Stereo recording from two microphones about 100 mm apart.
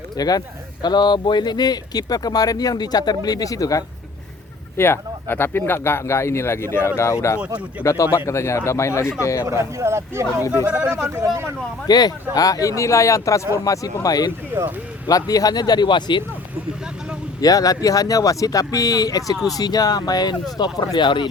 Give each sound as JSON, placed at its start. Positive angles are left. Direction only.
{"t": 0.2, "sound": "speech", "side_deg": 40}
{"t": 4.8, "sound": "speech", "side_deg": 25}
{"t": 7.8, "sound": "speech", "side_deg": -15}
{"t": 8.3, "sound": "speech", "side_deg": 30}
{"t": 9.5, "sound": "speech", "side_deg": -30}
{"t": 10.7, "sound": "speech", "side_deg": -15}
{"t": 11.0, "sound": "speech", "side_deg": -25}
{"t": 11.9, "sound": "speech", "side_deg": 40}
{"t": 17.4, "sound": "speech", "side_deg": 35}